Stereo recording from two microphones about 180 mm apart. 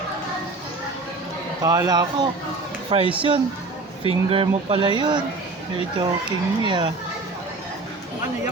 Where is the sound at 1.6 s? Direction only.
20° right (ahead or behind).